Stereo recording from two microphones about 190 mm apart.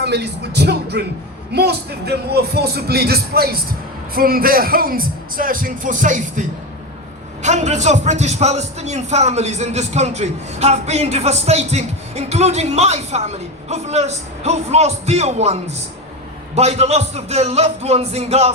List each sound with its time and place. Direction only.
0.0 s speech: 60° right (ahead or behind); by 6.4 s 40° right (ahead or behind)
7.4 s speech: 35° right (ahead or behind)